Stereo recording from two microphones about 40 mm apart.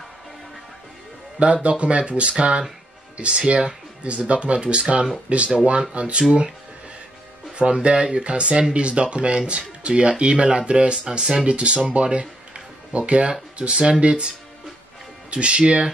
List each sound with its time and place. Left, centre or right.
1.4 s speech: right
7.5 s speech: right
11.4 s speech: right